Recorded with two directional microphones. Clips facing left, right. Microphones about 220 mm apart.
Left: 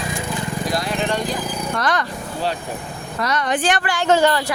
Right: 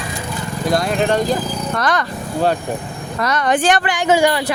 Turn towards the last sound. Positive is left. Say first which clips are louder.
# right 1 dB
turn(degrees=-10)  # may be behind; listen again after turning